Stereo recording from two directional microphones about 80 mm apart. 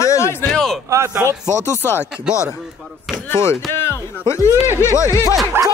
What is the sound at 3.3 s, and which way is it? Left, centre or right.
Speech, left.